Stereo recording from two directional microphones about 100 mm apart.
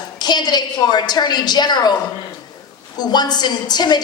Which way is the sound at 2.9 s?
45° left (ahead or behind).